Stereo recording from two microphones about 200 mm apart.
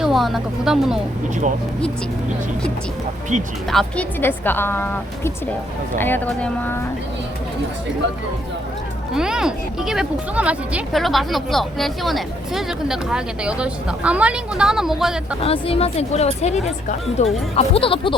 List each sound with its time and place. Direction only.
0.0 s speech: centre (ahead or behind)
3.7 s a woman's voice: 5° left (ahead or behind)
9.1 s speech: 5° right (ahead or behind)
15.4 s speech: 30° left (ahead or behind)